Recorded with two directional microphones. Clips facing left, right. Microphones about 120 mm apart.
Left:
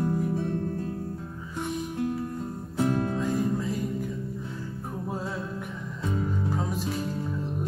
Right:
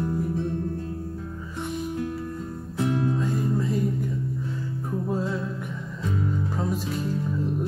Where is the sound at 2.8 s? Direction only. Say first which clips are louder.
Right 1 dB; 35° left (ahead or behind).